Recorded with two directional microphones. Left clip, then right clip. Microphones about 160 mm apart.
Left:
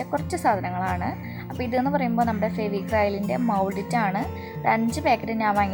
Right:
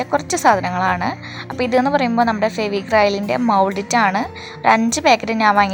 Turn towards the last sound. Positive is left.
turn(degrees=-15)  # may be behind; listen again after turning